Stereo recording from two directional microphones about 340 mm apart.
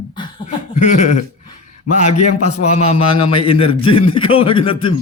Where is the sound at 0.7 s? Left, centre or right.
Left.